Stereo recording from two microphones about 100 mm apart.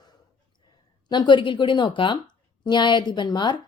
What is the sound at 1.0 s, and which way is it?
A woman's voice, 45° left (ahead or behind).